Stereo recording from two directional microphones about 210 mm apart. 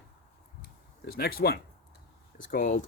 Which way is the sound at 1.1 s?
45° left (ahead or behind).